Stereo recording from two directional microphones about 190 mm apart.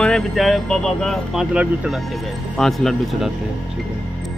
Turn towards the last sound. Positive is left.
turn(degrees=0)  # may be behind; listen again after turning